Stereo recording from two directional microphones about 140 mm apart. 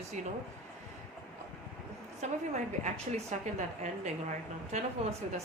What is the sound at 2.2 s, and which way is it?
A woman's voice, 60° right (ahead or behind).